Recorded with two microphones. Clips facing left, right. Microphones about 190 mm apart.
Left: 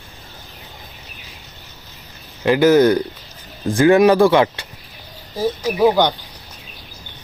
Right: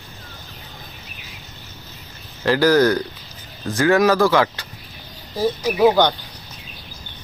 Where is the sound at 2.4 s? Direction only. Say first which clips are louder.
Left 3 dB; 20° left (ahead or behind).